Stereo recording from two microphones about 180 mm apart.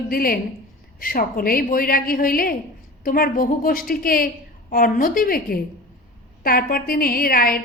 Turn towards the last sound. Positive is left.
turn(degrees=55)  # may be behind; listen again after turning